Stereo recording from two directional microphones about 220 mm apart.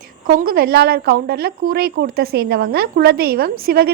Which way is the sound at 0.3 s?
45° right (ahead or behind).